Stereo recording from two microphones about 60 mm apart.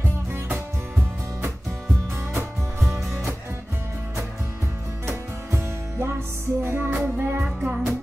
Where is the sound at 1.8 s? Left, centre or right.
Centre.